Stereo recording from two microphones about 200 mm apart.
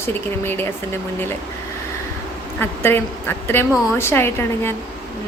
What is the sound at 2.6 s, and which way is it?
A woman's voice, 10° left (ahead or behind).